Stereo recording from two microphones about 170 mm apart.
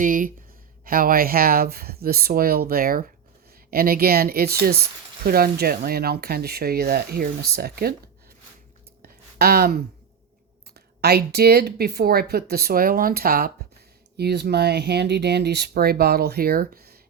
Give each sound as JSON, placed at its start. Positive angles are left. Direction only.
{"t": 0.0, "sound": "speech", "side_deg": -50}
{"t": 9.0, "sound": "a sound", "side_deg": -65}
{"t": 10.8, "sound": "speech", "side_deg": -70}
{"t": 14.2, "sound": "speech", "side_deg": -75}